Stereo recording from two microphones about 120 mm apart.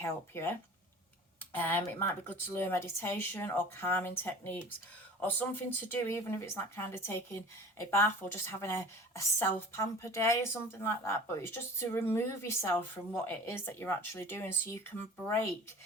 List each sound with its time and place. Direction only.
0.0 s speech: 20° left (ahead or behind)
1.5 s speech: 15° left (ahead or behind)